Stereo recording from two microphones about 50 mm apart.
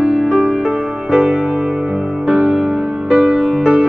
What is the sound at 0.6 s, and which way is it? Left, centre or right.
Music, centre.